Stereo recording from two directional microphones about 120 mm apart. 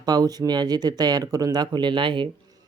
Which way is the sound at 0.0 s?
35° right (ahead or behind).